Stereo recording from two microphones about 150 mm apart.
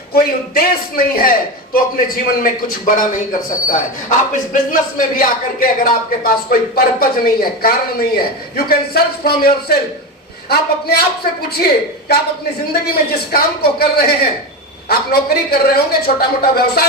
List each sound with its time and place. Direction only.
0.1 s a man's voice: 85° left
14.8 s a man's voice: 90° left